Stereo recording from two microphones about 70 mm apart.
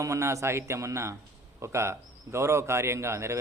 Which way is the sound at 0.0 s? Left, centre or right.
Right.